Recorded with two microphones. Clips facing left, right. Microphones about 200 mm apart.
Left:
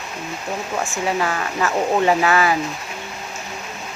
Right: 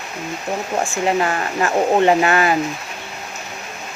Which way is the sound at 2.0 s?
55° right (ahead or behind).